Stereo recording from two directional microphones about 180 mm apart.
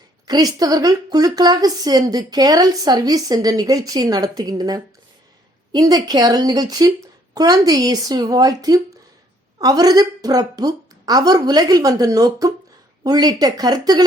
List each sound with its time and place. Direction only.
0.3 s a woman's voice: 20° right (ahead or behind)